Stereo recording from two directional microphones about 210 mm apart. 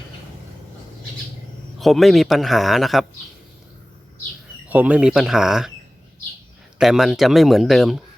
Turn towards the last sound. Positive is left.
turn(degrees=0)  # may be behind; listen again after turning